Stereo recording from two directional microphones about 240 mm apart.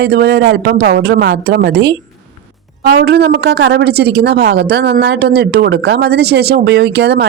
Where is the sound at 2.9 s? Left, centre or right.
Right.